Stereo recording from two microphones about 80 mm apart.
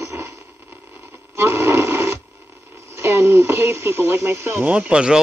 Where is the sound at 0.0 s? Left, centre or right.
Right.